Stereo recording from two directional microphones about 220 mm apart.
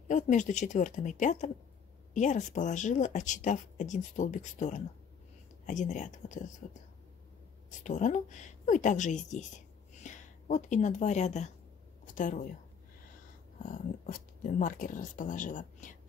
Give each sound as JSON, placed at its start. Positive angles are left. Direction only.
{"t": 0.1, "sound": "speech", "side_deg": 35}
{"t": 7.8, "sound": "speech", "side_deg": 35}
{"t": 13.6, "sound": "speech", "side_deg": 35}